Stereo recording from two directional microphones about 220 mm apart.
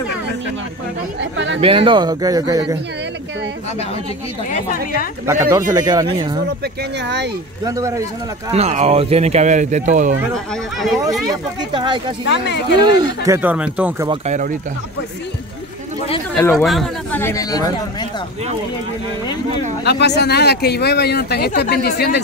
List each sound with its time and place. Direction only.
1.3 s speech: 55° right (ahead or behind)
1.6 s speech: 25° right (ahead or behind)
4.5 s a woman's voice: 35° left (ahead or behind)
5.2 s speech: 15° right (ahead or behind)
7.6 s speech: 15° right (ahead or behind)
8.5 s speech: 30° right (ahead or behind)
10.3 s speech: centre (ahead or behind)
11.2 s speech: 20° right (ahead or behind)
12.3 s speech: 50° left (ahead or behind)
12.7 s speech: 20° right (ahead or behind)
14.0 s speech: 30° right (ahead or behind)
16.3 s speech: 5° left (ahead or behind)
19.8 s speech: 50° left (ahead or behind)